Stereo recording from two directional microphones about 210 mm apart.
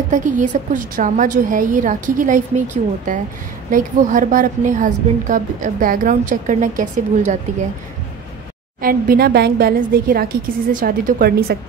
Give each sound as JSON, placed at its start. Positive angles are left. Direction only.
{"t": 0.1, "sound": "a woman's voice", "side_deg": -35}
{"t": 8.8, "sound": "a woman's voice", "side_deg": -45}